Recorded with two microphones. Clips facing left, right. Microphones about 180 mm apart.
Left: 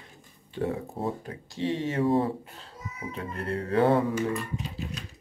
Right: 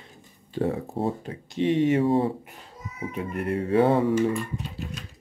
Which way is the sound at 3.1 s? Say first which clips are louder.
Right 4 dB; 15° right (ahead or behind).